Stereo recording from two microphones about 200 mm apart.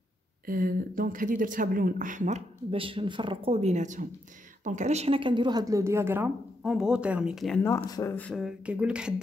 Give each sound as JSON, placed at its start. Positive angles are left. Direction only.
{"t": 0.5, "sound": "a woman's voice", "side_deg": -45}
{"t": 7.6, "sound": "speech", "side_deg": 15}